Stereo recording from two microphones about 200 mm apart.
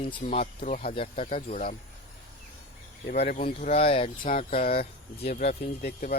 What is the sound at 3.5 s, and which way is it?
Speech, 30° left (ahead or behind).